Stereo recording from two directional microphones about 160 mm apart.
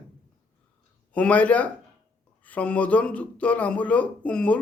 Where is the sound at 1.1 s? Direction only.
10° left (ahead or behind).